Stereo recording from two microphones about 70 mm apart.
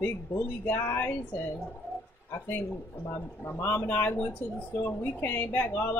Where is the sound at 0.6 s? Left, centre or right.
Left.